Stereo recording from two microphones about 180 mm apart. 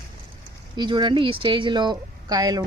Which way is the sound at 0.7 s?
25° right (ahead or behind).